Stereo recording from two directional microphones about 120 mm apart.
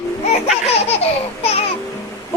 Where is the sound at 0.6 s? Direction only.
55° left (ahead or behind).